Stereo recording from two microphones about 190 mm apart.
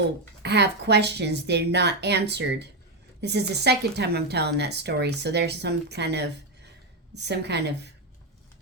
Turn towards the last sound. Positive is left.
turn(degrees=-60)  # may be behind; listen again after turning